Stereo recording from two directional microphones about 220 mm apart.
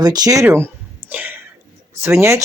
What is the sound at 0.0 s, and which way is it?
Speech, 20° right (ahead or behind).